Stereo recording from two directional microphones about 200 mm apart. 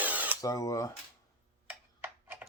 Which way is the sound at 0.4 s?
15° left (ahead or behind).